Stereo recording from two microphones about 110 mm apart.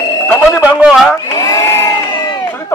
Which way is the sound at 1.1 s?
30° left (ahead or behind).